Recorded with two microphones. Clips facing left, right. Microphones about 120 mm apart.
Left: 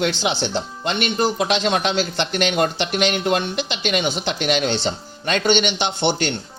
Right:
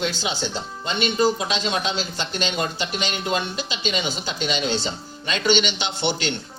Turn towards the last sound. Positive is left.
turn(degrees=55)  # may be behind; listen again after turning